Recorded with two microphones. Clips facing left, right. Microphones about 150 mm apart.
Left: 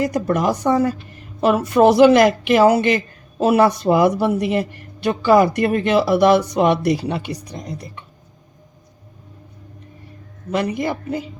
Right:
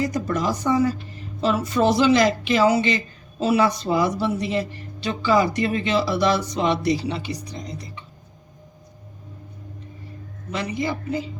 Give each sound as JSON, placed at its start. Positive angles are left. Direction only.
{"t": 0.0, "sound": "speech", "side_deg": 60}
{"t": 10.5, "sound": "speech", "side_deg": 55}